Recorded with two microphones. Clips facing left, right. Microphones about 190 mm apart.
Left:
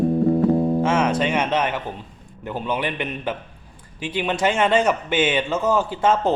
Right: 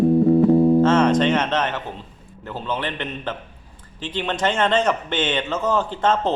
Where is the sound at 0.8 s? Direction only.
10° left (ahead or behind).